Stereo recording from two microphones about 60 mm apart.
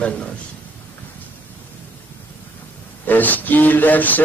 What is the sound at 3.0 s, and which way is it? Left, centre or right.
A man's voice, left.